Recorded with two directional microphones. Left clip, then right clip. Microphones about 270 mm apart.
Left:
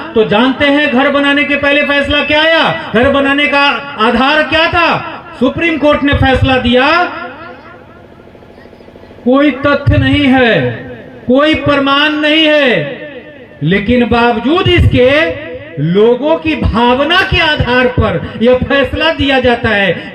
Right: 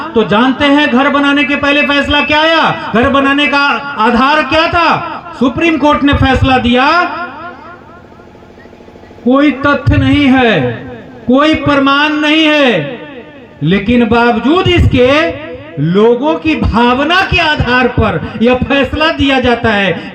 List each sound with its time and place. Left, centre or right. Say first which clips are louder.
0.0 s a man's voice: even; right
9.3 s a man's voice: even; right